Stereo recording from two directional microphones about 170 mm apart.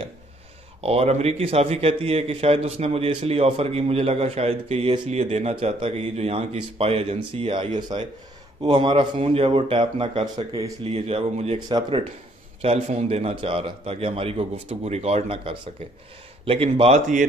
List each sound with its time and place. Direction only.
0.7 s a man's voice: 35° right (ahead or behind)
10.8 s a man's voice: 35° right (ahead or behind)
12.6 s a man's voice: 40° right (ahead or behind)